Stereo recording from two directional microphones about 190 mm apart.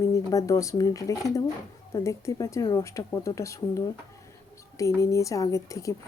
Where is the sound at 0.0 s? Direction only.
15° left (ahead or behind).